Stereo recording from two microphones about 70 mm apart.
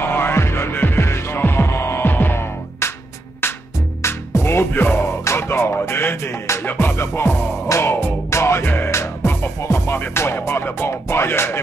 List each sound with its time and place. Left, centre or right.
0.0 s music: left
4.0 s music: left
6.6 s music: left
9.9 s music: left